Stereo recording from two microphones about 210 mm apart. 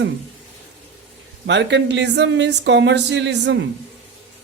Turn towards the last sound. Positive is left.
turn(degrees=-60)  # may be behind; listen again after turning